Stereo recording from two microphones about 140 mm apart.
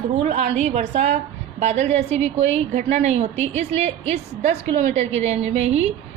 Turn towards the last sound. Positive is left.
turn(degrees=-50)  # may be behind; listen again after turning